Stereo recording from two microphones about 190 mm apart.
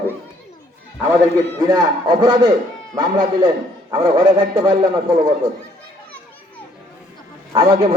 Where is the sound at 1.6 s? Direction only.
20° right (ahead or behind).